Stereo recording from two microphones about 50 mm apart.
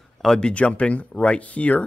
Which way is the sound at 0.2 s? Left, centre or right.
Centre.